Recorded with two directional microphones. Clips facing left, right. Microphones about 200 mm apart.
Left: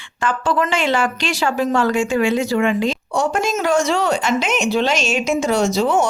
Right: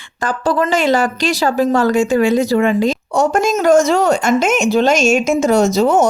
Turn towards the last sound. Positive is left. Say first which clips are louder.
# right 4 dB
turn(degrees=-45)  # may be behind; listen again after turning